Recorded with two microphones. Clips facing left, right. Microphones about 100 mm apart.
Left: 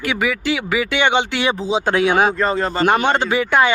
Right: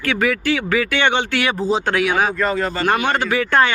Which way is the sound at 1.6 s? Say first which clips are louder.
Right 1 dB; centre (ahead or behind).